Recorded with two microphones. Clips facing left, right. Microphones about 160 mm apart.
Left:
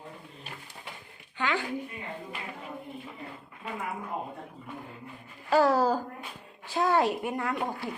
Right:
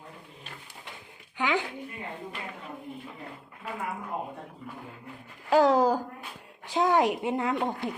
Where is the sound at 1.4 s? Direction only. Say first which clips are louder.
Right 2 dB; 15° right (ahead or behind).